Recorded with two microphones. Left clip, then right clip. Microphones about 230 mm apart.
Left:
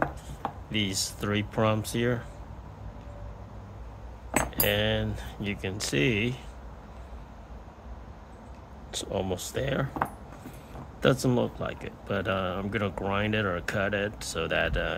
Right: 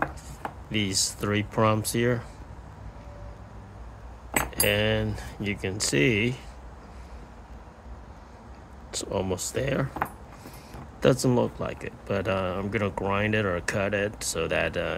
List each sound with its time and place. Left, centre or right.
0.7 s speech: centre
4.6 s speech: centre
8.9 s speech: centre
11.0 s speech: centre